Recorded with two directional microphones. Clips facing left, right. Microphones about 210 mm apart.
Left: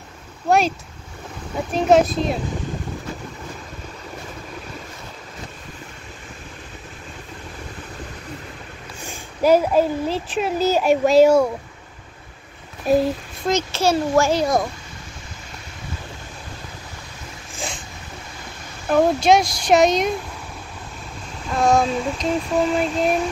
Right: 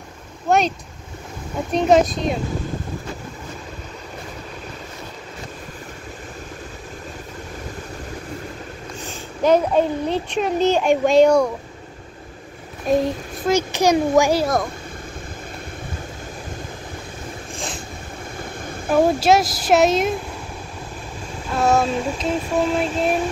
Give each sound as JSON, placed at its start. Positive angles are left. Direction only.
{"t": 0.5, "sound": "a child's voice", "side_deg": 5}
{"t": 9.0, "sound": "a child's voice", "side_deg": 10}
{"t": 12.9, "sound": "a child's voice", "side_deg": 5}
{"t": 13.5, "sound": "a child's voice", "side_deg": -15}
{"t": 14.4, "sound": "a child's voice", "side_deg": 0}
{"t": 18.9, "sound": "a child's voice", "side_deg": -5}
{"t": 21.5, "sound": "a child's voice", "side_deg": -5}